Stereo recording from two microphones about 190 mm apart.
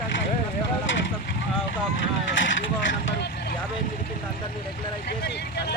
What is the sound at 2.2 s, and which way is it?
Speech, 80° left.